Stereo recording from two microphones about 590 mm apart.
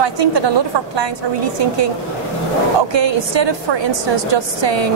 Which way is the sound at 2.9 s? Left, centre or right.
Right.